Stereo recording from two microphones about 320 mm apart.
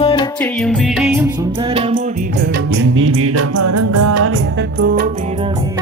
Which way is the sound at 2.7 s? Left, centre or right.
Right.